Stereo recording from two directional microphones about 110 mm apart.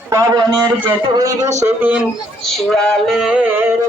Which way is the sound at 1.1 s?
30° right (ahead or behind).